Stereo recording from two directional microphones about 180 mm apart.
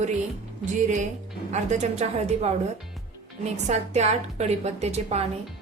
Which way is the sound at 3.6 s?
40° right (ahead or behind).